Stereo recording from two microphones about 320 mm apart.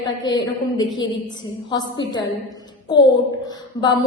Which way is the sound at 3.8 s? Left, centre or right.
Centre.